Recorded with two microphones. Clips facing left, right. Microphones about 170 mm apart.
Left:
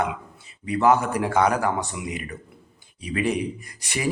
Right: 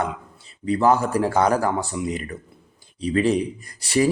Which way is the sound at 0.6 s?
35° right (ahead or behind).